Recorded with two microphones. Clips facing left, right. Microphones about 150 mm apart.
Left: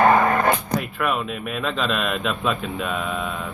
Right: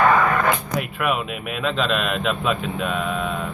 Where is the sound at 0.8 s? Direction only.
5° right (ahead or behind).